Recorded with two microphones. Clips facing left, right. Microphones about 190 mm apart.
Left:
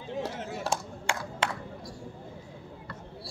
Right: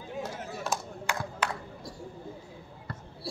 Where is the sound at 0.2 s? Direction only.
30° left (ahead or behind).